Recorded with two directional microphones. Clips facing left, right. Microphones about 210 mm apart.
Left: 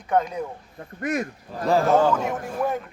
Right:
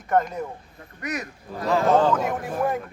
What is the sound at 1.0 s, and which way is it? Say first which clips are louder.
Speech: left 5 dB; 50° left (ahead or behind).